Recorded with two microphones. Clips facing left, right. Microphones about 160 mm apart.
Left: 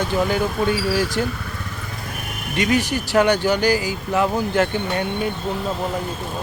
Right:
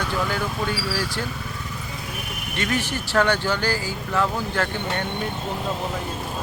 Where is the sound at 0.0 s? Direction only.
20° left (ahead or behind).